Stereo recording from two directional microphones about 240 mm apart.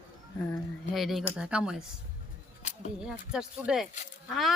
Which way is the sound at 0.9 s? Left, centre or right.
Centre.